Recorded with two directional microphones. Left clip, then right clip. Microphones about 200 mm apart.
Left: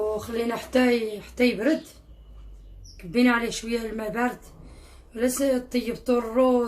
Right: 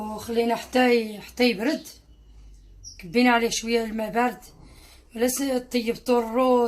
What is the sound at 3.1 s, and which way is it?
Speech, 35° right (ahead or behind).